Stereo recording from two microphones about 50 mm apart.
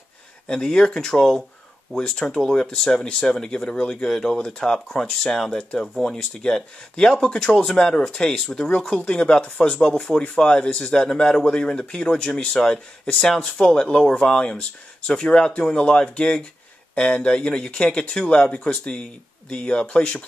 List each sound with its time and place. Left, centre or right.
0.5 s speech: centre